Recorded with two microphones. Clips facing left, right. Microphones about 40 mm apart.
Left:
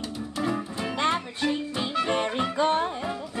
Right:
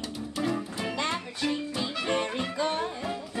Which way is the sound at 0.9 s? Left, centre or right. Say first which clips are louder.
Left 7 dB; left.